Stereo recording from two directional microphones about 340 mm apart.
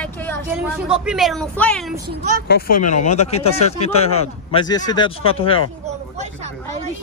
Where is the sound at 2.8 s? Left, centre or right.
Left.